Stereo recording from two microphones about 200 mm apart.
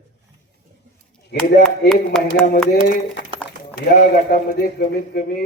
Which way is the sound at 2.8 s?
60° left (ahead or behind).